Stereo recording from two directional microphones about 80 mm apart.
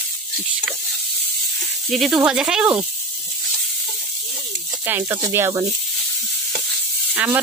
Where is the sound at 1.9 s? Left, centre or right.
Centre.